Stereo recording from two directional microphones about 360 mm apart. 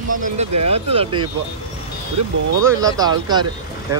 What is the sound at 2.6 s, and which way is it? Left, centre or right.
Speech, centre.